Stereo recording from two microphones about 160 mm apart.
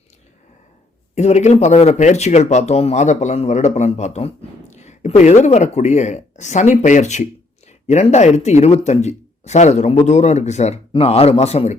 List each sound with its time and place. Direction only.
1.1 s speech: 45° left (ahead or behind)